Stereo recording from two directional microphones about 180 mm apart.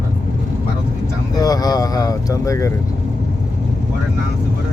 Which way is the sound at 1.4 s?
20° left (ahead or behind).